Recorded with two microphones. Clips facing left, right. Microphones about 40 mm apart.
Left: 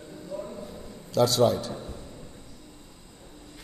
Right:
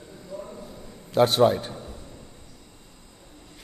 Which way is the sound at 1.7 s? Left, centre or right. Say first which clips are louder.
Left 1 dB; centre.